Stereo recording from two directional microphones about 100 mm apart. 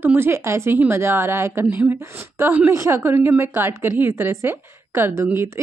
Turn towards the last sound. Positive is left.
turn(degrees=-25)  # may be behind; listen again after turning